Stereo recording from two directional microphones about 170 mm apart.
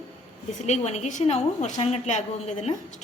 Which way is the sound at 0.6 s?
40° left (ahead or behind).